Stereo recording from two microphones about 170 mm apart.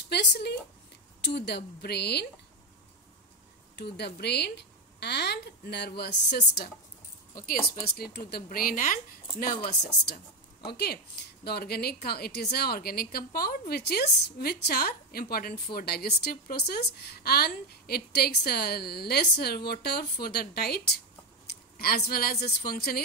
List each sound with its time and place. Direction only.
0.1 s speech: 75° left (ahead or behind)
3.7 s speech: 70° left (ahead or behind)
7.9 s a woman's voice: 65° left (ahead or behind)
10.0 s a woman's voice: 70° left (ahead or behind)